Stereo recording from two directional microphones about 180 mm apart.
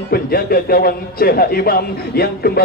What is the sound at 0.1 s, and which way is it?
A man's voice, 60° left (ahead or behind).